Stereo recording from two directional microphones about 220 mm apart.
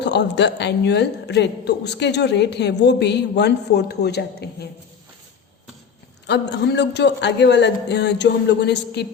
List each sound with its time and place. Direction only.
0.0 s a woman's voice: 50° left (ahead or behind)
6.2 s a woman's voice: 50° left (ahead or behind)